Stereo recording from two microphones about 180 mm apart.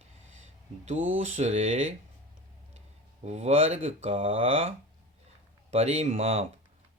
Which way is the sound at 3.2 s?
35° right (ahead or behind).